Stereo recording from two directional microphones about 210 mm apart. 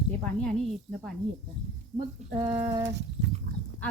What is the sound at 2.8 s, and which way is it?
Horse, 55° right (ahead or behind).